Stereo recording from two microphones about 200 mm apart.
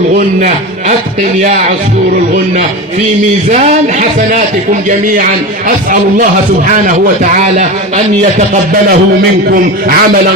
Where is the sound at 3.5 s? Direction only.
35° right (ahead or behind).